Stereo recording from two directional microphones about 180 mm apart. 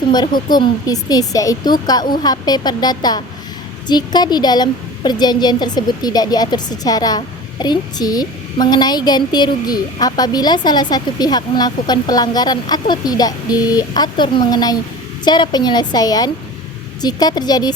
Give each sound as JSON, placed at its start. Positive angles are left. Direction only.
{"t": 0.1, "sound": "a woman's voice", "side_deg": 25}